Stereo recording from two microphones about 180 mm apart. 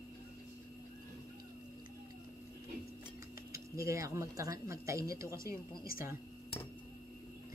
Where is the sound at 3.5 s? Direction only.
15° right (ahead or behind).